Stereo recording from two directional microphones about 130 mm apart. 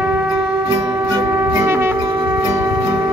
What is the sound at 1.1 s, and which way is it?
Wind instrument, 25° right (ahead or behind).